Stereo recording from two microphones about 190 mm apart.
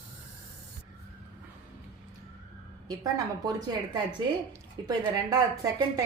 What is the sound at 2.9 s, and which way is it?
A woman's voice, 20° right (ahead or behind).